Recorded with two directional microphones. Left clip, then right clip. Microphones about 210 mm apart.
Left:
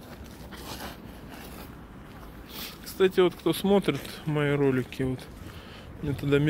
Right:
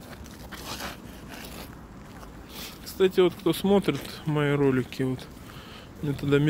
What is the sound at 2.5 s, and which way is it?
Speech, 5° right (ahead or behind).